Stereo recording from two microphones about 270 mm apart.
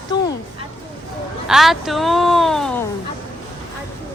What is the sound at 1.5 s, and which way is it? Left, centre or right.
Speech, centre.